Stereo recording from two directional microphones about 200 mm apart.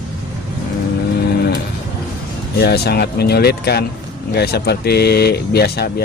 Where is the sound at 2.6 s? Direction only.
55° left (ahead or behind).